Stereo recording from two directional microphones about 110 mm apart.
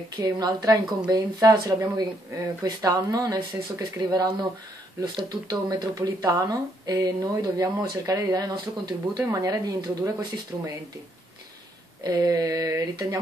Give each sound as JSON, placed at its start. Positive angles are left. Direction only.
{"t": 0.1, "sound": "speech", "side_deg": -35}
{"t": 5.3, "sound": "speech", "side_deg": -35}
{"t": 12.0, "sound": "speech", "side_deg": -35}